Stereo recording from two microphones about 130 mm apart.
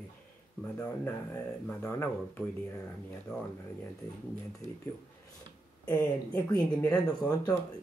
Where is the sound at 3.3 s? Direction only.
30° left (ahead or behind).